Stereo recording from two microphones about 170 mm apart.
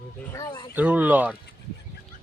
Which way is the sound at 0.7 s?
10° right (ahead or behind).